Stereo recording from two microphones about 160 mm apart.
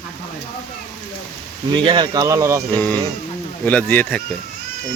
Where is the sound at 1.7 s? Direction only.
30° right (ahead or behind).